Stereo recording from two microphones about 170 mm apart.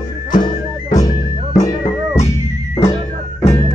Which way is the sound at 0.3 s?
25° left (ahead or behind).